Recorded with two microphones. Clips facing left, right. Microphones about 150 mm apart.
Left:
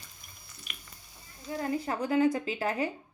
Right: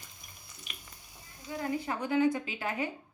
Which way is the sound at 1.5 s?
40° left (ahead or behind).